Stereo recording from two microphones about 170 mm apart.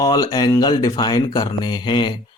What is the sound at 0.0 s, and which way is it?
A man's voice, 25° left (ahead or behind).